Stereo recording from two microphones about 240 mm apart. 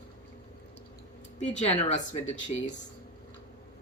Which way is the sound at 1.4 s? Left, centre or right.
Left.